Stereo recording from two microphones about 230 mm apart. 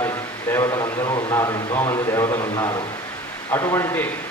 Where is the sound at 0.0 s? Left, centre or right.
Centre.